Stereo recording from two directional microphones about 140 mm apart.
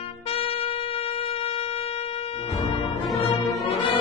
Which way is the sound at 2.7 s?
40° left (ahead or behind).